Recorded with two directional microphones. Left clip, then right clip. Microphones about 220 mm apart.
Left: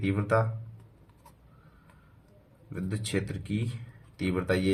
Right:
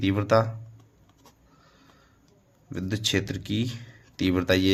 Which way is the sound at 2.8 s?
40° right (ahead or behind).